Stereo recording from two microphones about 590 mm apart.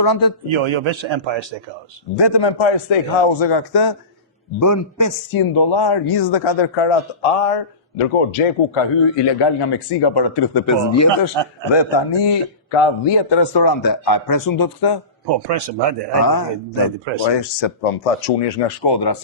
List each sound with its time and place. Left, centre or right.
0.0 s a man's voice: left
0.5 s a man's voice: right
2.1 s a man's voice: left
10.7 s speech: left
11.7 s a man's voice: left
15.4 s speech: right
16.2 s a man's voice: left
17.2 s speech: left
18.0 s speech: left
18.9 s a man's voice: left